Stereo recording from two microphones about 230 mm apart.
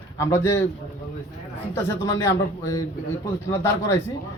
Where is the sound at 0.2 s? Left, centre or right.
Centre.